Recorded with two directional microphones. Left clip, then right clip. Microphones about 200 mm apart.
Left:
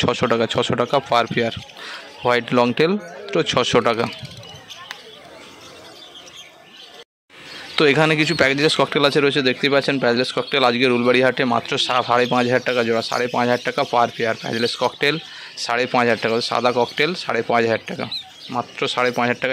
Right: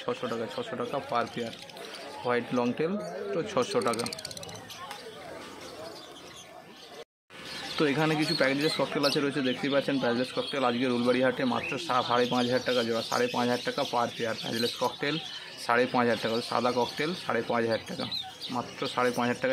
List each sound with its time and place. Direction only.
0.0 s speech: 50° left (ahead or behind)
7.7 s a man's voice: 45° left (ahead or behind)